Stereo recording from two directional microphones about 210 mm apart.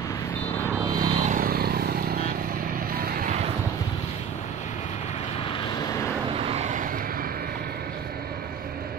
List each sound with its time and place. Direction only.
1.0 s vehicle: 30° right (ahead or behind)
3.1 s vehicle: 45° right (ahead or behind)
6.3 s vehicle: 30° right (ahead or behind)